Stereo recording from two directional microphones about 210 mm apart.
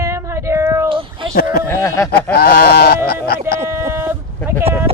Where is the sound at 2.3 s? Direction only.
50° left (ahead or behind).